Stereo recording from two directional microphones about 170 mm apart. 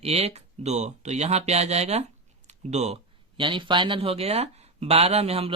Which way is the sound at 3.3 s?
30° right (ahead or behind).